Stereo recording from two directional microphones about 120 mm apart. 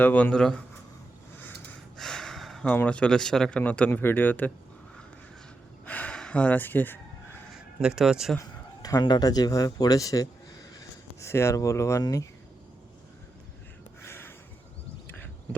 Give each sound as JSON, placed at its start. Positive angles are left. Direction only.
{"t": 0.0, "sound": "speech", "side_deg": 10}
{"t": 2.0, "sound": "a sound", "side_deg": 5}
{"t": 2.7, "sound": "speech", "side_deg": 10}
{"t": 5.8, "sound": "gasp", "side_deg": 15}
{"t": 7.8, "sound": "speech", "side_deg": -5}
{"t": 8.4, "sound": "speech", "side_deg": 30}
{"t": 14.0, "sound": "a sound", "side_deg": 20}